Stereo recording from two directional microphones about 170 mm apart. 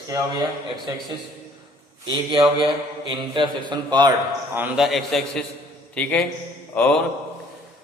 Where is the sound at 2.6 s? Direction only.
30° right (ahead or behind).